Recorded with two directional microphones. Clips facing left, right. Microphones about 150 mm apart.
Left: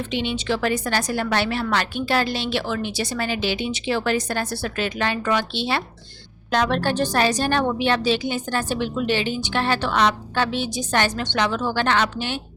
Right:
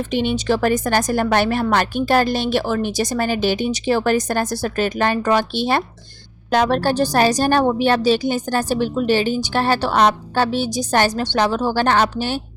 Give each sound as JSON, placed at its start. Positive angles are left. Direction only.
{"t": 0.1, "sound": "a woman's voice", "side_deg": -45}